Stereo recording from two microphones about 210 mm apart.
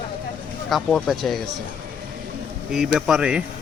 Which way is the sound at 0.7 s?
Centre (ahead or behind).